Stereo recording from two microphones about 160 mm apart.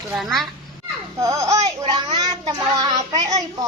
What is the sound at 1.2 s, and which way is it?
A child's voice, 20° right (ahead or behind).